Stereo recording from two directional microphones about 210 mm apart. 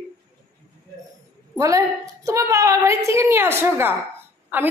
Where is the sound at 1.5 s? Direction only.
15° right (ahead or behind).